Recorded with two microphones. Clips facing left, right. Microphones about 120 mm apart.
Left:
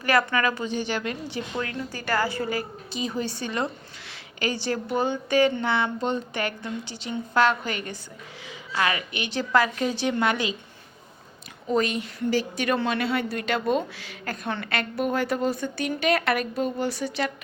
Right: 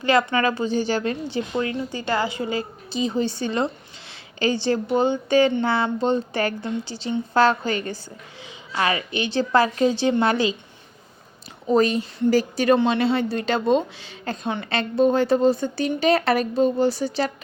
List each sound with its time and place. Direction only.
0.0 s a woman's voice: 20° right (ahead or behind)
11.7 s a woman's voice: 35° right (ahead or behind)